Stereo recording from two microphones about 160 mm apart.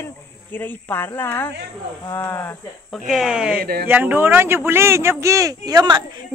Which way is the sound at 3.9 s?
10° right (ahead or behind).